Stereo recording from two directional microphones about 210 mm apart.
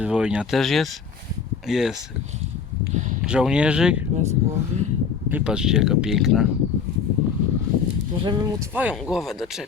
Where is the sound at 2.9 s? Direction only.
35° right (ahead or behind).